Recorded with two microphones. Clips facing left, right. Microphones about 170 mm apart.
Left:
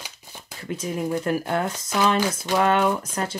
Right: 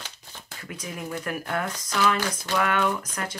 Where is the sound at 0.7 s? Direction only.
25° left (ahead or behind).